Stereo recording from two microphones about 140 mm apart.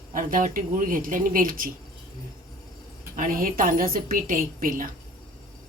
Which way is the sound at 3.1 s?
75° right (ahead or behind).